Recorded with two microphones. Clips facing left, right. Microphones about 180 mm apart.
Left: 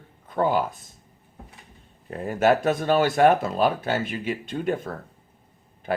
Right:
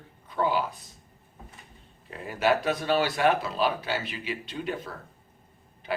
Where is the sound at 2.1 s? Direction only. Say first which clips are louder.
Left 5 dB; 45° left (ahead or behind).